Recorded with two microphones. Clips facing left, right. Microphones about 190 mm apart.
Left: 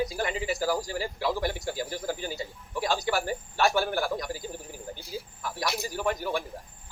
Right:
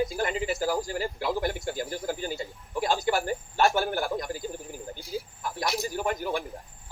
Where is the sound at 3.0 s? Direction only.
45° right (ahead or behind).